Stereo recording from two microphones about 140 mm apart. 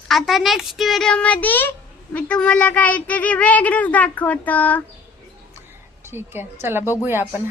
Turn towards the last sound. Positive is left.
turn(degrees=-15)  # may be behind; listen again after turning